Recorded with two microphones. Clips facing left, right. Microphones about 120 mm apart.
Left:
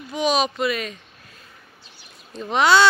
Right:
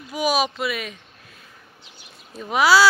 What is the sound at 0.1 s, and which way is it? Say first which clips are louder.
Speech: left 1 dB; 5° right (ahead or behind).